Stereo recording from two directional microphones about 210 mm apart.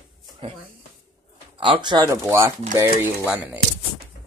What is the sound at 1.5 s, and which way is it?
Speech, 25° right (ahead or behind).